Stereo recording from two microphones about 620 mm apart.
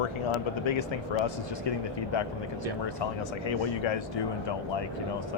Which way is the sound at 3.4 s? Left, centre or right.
Left.